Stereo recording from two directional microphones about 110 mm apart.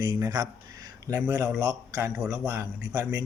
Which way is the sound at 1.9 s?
30° right (ahead or behind).